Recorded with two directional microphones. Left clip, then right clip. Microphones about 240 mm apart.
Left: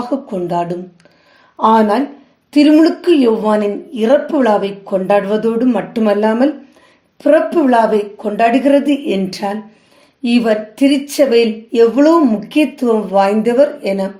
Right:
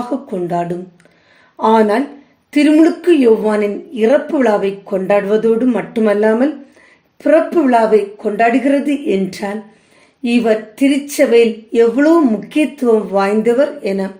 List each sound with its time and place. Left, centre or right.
0.1 s speech: centre